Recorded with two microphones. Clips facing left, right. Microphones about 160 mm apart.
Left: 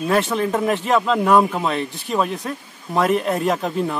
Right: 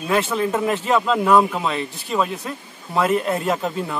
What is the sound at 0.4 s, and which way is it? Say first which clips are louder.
Speech: left 1 dB; 5° right (ahead or behind).